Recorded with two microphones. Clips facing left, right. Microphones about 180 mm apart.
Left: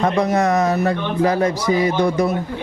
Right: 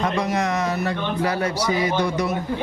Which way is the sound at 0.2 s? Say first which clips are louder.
Left 6 dB; 50° left (ahead or behind).